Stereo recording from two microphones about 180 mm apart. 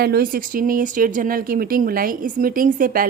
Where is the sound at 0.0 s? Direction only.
55° right (ahead or behind).